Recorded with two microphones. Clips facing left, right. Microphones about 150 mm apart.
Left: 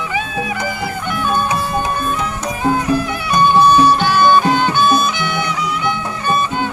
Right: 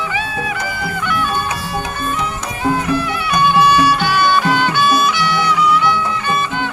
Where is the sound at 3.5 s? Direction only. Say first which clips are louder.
Left 2 dB; 40° left (ahead or behind).